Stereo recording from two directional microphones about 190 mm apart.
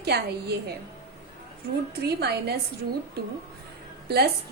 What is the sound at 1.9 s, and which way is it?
Speech, 60° right (ahead or behind).